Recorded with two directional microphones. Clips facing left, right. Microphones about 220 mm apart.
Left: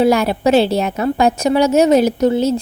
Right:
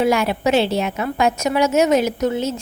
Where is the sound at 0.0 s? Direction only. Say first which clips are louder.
Left 4 dB; 35° left (ahead or behind).